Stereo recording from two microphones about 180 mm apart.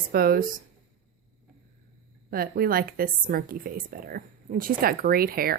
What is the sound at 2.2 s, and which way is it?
A woman's voice, 55° right (ahead or behind).